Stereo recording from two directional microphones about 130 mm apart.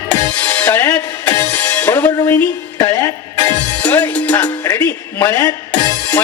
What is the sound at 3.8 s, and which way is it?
Music, 10° left (ahead or behind).